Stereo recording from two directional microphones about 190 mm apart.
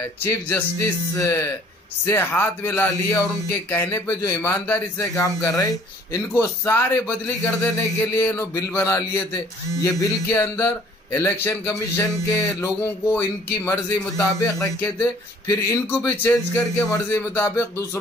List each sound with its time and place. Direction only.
0.0 s a man's voice: 10° left (ahead or behind)